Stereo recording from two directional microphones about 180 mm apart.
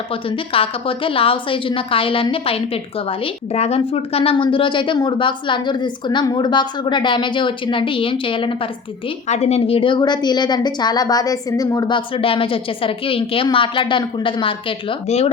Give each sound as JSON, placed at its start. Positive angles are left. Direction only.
{"t": 0.1, "sound": "a woman's voice", "side_deg": 30}